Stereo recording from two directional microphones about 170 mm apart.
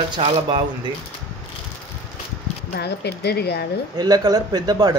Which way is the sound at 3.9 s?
25° right (ahead or behind).